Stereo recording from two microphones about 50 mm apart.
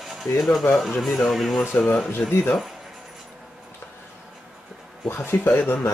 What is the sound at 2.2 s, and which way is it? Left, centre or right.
Speech, left.